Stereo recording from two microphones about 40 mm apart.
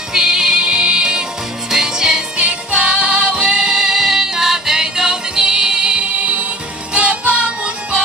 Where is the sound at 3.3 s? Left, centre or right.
Centre.